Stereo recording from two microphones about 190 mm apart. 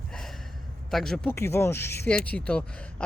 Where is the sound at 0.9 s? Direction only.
Centre (ahead or behind).